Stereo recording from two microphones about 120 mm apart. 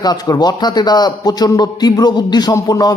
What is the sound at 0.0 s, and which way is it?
Speech, 35° left (ahead or behind).